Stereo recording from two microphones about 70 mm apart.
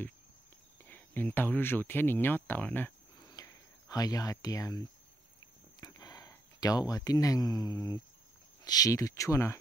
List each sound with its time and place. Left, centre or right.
0.8 s speech: left
3.2 s a sound: left
5.8 s speech: left